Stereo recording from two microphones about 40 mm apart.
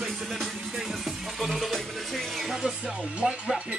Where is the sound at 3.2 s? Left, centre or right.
Centre.